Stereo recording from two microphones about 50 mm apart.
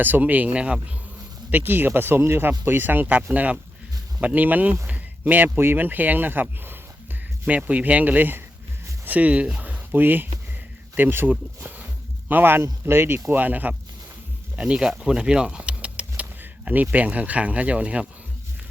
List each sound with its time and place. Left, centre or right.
0.0 s speech: right
1.5 s speech: right
4.9 s a sound: right
5.5 s speech: right
7.4 s speech: right
10.0 s speech: right
12.3 s speech: right
13.3 s speech: right
14.5 s speech: right
14.9 s a sound: centre
16.4 s speech: right